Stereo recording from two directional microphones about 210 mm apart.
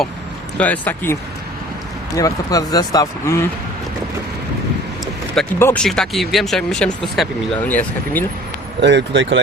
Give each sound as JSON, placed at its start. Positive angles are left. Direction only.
{"t": 0.5, "sound": "speech", "side_deg": 5}
{"t": 5.3, "sound": "speech", "side_deg": 5}
{"t": 8.8, "sound": "speech", "side_deg": -55}